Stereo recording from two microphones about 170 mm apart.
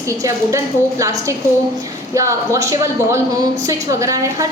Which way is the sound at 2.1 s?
20° right (ahead or behind).